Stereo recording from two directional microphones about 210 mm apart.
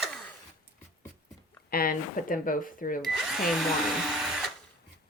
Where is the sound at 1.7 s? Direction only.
45° left (ahead or behind).